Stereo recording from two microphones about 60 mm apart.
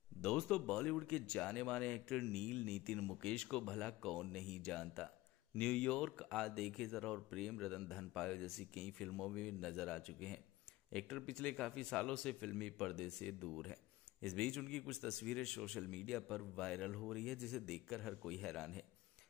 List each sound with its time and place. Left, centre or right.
0.5 s speech: centre
5.6 s speech: centre